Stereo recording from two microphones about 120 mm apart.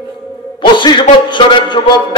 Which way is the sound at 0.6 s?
40° left (ahead or behind).